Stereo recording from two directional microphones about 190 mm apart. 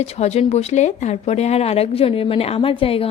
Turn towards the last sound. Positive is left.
turn(degrees=30)  # may be behind; listen again after turning